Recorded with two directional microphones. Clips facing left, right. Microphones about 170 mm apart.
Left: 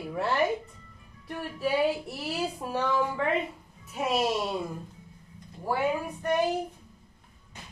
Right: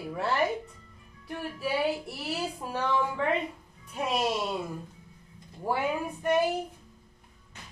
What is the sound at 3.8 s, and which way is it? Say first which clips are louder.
Speech: left 2 dB; 5° left (ahead or behind).